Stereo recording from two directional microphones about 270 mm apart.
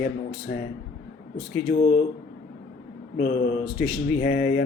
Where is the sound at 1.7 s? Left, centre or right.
Left.